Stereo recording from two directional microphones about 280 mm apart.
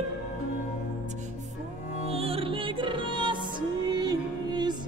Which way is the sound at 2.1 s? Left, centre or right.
Centre.